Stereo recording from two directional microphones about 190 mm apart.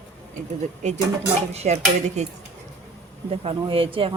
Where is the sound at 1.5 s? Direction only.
35° right (ahead or behind).